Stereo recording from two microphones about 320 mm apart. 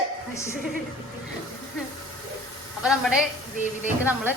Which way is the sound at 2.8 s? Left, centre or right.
Centre.